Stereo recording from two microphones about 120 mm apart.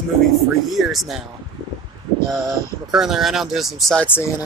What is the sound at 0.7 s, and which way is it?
Speech, centre (ahead or behind).